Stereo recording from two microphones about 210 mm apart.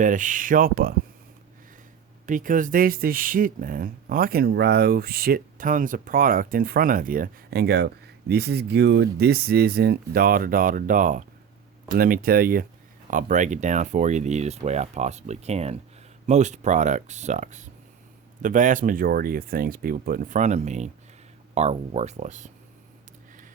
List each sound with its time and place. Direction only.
0.0 s speech: 40° right (ahead or behind)
2.2 s speech: 40° right (ahead or behind)